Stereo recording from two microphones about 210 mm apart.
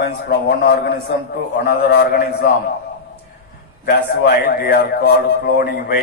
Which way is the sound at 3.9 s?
50° left (ahead or behind).